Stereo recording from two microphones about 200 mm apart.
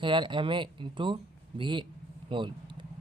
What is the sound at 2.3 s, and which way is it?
Vehicle, 25° right (ahead or behind).